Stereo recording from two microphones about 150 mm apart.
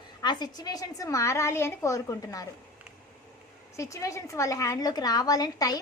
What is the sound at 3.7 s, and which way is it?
A woman's voice, 20° left (ahead or behind).